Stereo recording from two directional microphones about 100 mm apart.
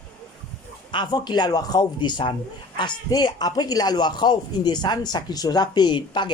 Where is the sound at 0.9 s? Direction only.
45° left (ahead or behind).